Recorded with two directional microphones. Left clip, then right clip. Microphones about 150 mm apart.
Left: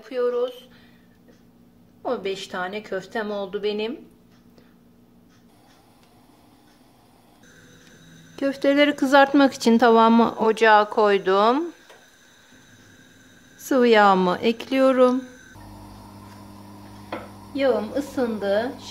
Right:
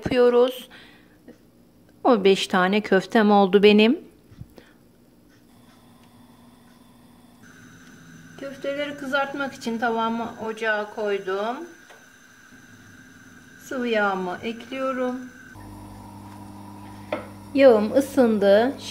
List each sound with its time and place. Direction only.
0.0 s speech: 65° right (ahead or behind)
2.0 s a woman's voice: 90° right
8.4 s speech: 90° left
13.7 s speech: 90° left
17.6 s a woman's voice: 65° right (ahead or behind)